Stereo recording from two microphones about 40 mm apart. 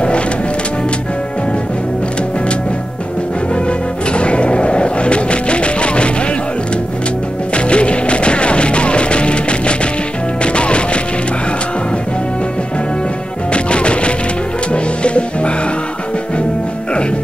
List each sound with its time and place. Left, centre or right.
4.2 s music: left
7.5 s music: left
13.5 s music: left